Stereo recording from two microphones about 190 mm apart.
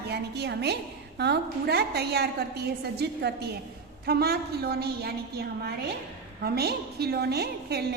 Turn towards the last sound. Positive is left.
turn(degrees=-55)  # may be behind; listen again after turning